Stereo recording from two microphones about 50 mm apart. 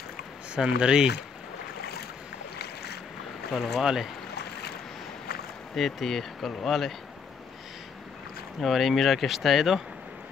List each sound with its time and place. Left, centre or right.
0.6 s speech: centre
3.5 s speech: centre
3.8 s speech: centre
5.8 s speech: centre
8.5 s speech: centre